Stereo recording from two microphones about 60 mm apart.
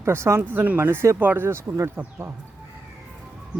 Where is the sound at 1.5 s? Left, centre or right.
Right.